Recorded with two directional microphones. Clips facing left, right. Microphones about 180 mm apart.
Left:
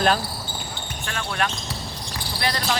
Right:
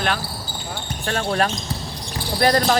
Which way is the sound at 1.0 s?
35° right (ahead or behind).